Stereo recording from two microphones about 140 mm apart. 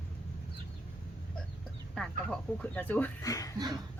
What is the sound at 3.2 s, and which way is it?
Speech, 25° left (ahead or behind).